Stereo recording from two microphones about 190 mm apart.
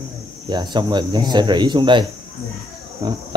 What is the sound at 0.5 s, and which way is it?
Speech, 20° right (ahead or behind).